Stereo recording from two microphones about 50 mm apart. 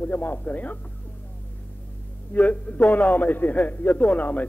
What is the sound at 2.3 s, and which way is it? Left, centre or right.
A man's voice, left.